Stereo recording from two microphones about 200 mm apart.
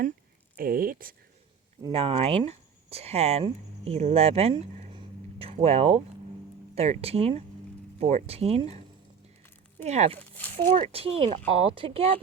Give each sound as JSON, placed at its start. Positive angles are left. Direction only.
{"t": 0.5, "sound": "speech", "side_deg": -45}
{"t": 1.9, "sound": "speech", "side_deg": -30}
{"t": 9.8, "sound": "speech", "side_deg": -35}